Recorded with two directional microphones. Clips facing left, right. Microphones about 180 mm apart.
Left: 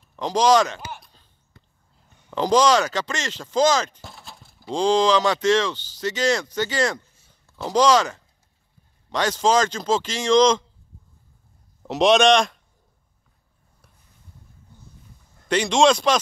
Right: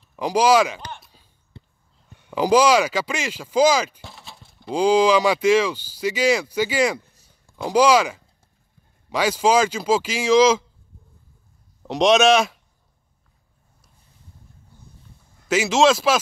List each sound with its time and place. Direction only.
0.1 s speech: 10° right (ahead or behind)
0.7 s a sound: 5° left (ahead or behind)
1.5 s a sound: 30° right (ahead or behind)
2.3 s speech: 10° right (ahead or behind)
11.8 s speech: centre (ahead or behind)
15.4 s speech: 5° right (ahead or behind)